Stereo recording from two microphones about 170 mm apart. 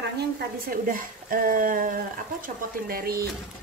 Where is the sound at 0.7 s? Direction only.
55° right (ahead or behind).